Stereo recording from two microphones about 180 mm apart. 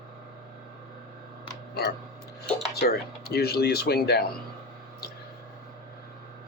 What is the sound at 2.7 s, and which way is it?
Speech, 60° left (ahead or behind).